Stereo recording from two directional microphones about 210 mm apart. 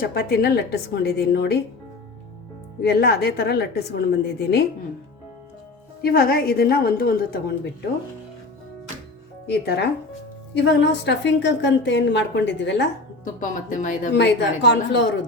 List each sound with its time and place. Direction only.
0.1 s a woman's voice: 50° left (ahead or behind)
2.8 s a woman's voice: 50° left (ahead or behind)
6.0 s a woman's voice: 45° left (ahead or behind)
9.5 s a woman's voice: 50° left (ahead or behind)
13.2 s speech: 40° left (ahead or behind)
14.2 s a woman's voice: 55° left (ahead or behind)